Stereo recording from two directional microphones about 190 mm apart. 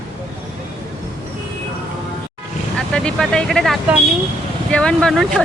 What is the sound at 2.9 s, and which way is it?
Speech, 5° left (ahead or behind).